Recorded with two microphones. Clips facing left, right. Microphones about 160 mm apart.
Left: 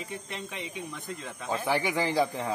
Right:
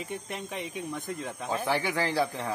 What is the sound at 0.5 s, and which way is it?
A man's voice, 15° right (ahead or behind).